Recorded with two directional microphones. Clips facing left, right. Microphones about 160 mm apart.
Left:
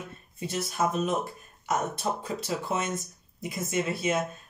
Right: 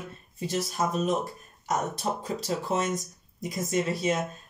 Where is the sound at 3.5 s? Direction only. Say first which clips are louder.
Right 2 dB; 35° right (ahead or behind).